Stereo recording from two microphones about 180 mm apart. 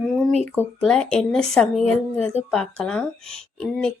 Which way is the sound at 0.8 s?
5° left (ahead or behind).